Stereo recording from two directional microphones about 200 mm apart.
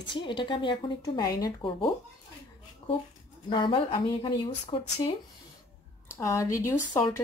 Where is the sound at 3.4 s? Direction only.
25° left (ahead or behind).